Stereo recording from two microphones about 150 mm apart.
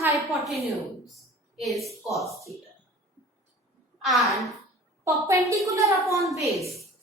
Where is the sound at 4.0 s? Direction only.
Centre (ahead or behind).